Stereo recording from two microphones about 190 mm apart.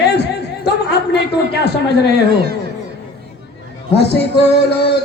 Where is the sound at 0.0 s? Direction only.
60° left (ahead or behind).